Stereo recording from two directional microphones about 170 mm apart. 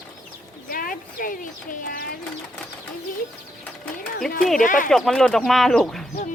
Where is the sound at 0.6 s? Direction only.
55° left (ahead or behind).